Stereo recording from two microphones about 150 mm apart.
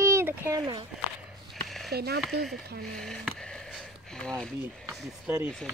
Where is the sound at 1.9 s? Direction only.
90° right.